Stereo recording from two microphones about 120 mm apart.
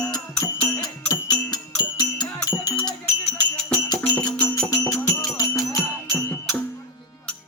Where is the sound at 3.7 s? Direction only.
30° left (ahead or behind).